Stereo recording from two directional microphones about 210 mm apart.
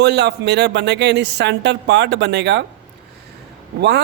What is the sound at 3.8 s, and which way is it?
Speech, 50° right (ahead or behind).